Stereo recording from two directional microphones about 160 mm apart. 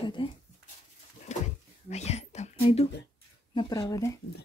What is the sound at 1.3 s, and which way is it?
Speech, 45° left (ahead or behind).